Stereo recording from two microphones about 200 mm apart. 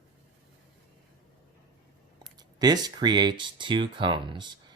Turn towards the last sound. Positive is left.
turn(degrees=-20)  # may be behind; listen again after turning